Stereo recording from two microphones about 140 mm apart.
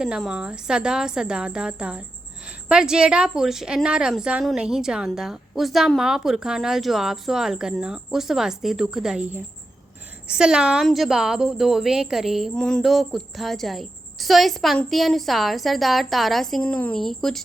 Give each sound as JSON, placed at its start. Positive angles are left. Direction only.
{"t": 0.0, "sound": "a woman's voice", "side_deg": -5}